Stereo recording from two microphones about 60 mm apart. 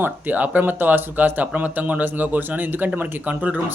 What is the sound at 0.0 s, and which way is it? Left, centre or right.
Speech, right.